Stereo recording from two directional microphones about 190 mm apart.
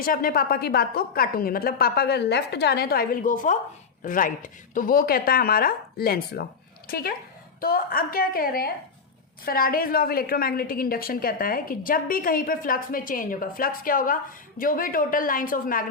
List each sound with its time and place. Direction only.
0.0 s a woman's voice: 50° left (ahead or behind)